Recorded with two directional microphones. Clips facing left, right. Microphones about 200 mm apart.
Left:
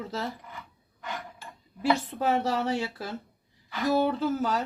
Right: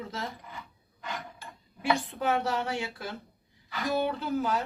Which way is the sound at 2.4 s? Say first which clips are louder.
Left 3 dB; 40° left (ahead or behind).